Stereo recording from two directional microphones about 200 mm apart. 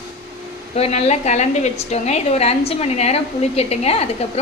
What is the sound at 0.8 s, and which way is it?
A woman's voice, 30° left (ahead or behind).